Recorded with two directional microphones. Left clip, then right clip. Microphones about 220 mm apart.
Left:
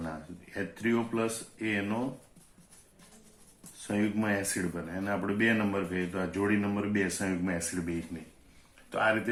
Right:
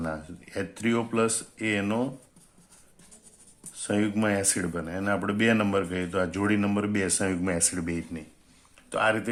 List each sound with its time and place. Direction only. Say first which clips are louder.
0.5 s speech: right 3 dB; 45° right (ahead or behind)
3.8 s speech: right 5 dB; 45° right (ahead or behind)
8.9 s speech: right 3 dB; 40° right (ahead or behind)